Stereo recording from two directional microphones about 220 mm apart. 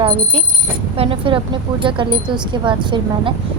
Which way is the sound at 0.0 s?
25° right (ahead or behind).